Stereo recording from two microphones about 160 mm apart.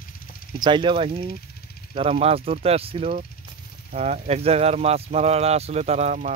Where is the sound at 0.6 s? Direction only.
30° right (ahead or behind).